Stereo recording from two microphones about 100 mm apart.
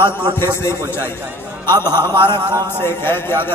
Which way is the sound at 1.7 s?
45° right (ahead or behind).